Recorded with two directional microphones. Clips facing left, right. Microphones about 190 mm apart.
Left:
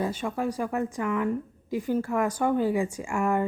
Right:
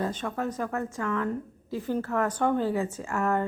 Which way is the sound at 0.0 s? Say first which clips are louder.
Left 2 dB; 10° left (ahead or behind).